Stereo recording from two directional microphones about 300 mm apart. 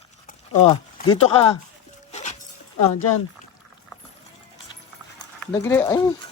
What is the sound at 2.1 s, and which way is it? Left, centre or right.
Dog, left.